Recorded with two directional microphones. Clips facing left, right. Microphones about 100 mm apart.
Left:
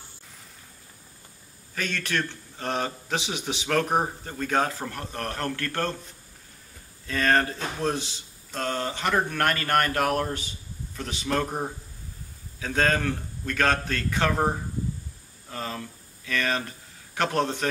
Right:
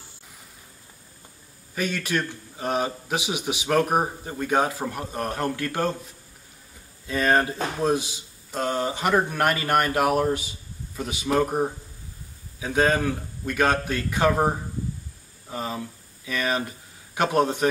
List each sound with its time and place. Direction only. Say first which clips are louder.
1.8 s a man's voice: right 3 dB; 10° right (ahead or behind)
7.1 s a man's voice: right 2 dB; 15° right (ahead or behind)